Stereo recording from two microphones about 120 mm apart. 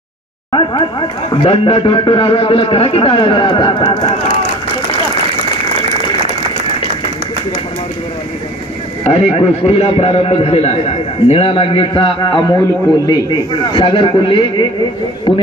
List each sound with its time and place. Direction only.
0.5 s a man's voice: 40° left (ahead or behind)
3.8 s speech: 75° left (ahead or behind)
9.0 s a man's voice: 60° left (ahead or behind)